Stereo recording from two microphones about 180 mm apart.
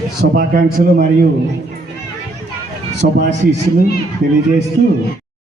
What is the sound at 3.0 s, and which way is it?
Speech, 70° right (ahead or behind).